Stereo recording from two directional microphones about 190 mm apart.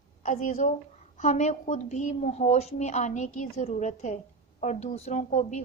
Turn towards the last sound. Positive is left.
turn(degrees=35)  # may be behind; listen again after turning